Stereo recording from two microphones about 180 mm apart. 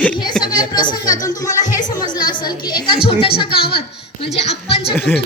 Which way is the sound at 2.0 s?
25° left (ahead or behind).